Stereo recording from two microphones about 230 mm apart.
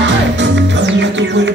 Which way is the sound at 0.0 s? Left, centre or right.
Right.